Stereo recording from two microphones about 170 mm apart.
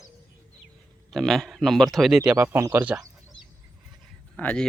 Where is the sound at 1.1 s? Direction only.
Centre (ahead or behind).